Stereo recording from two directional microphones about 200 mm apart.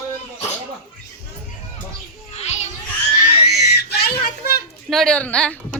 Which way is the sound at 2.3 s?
35° left (ahead or behind).